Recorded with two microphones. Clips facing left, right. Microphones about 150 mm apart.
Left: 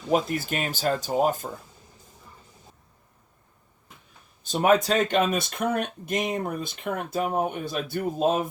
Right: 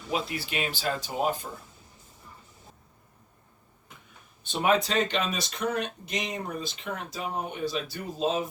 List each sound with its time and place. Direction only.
0.1 s speech: 45° left (ahead or behind)
4.4 s speech: 45° left (ahead or behind)